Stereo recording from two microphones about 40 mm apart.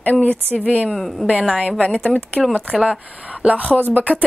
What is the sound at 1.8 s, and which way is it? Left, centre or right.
Speech, left.